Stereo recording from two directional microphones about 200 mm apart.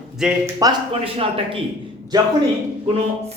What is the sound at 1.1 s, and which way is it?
Speech, 25° right (ahead or behind).